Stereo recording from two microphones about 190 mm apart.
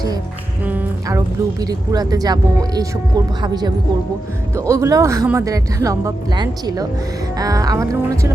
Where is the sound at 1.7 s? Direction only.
20° right (ahead or behind).